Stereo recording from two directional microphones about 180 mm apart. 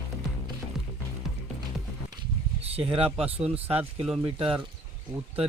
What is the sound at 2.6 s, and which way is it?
A man's voice, 30° right (ahead or behind).